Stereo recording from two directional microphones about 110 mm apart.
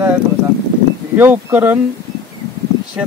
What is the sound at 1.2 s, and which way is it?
Speech, 20° right (ahead or behind).